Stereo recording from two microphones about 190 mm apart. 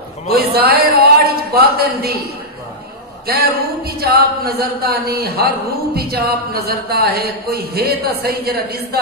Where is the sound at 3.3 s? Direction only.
55° right (ahead or behind).